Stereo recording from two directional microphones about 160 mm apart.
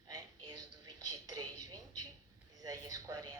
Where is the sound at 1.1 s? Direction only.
20° right (ahead or behind).